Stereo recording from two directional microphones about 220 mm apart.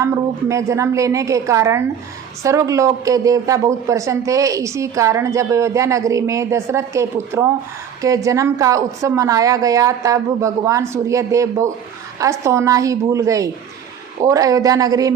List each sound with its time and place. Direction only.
0.0 s speech: 15° right (ahead or behind)